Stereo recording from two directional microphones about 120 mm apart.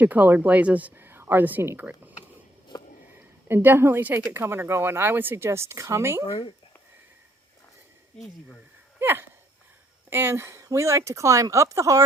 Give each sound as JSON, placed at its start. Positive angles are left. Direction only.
{"t": 0.0, "sound": "speech", "side_deg": -15}
{"t": 3.2, "sound": "a woman's voice", "side_deg": -20}
{"t": 9.0, "sound": "a sound", "side_deg": -20}
{"t": 10.1, "sound": "speech", "side_deg": -20}